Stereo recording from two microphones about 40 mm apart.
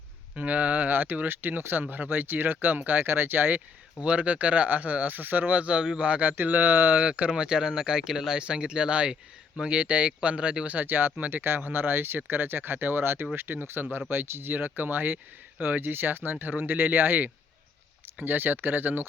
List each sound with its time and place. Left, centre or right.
0.3 s speech: right
0.9 s speech: right
3.1 s speech: right
4.0 s speech: right
6.3 s speech: right
6.9 s speech: right; by 8.4 s centre
8.4 s speech: right
10.8 s speech: right